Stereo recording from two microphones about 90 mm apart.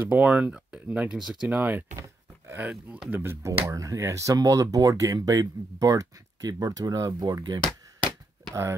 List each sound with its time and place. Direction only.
0.0 s speech: 15° right (ahead or behind)
1.5 s speech: 20° right (ahead or behind)
3.6 s speech: 40° right (ahead or behind)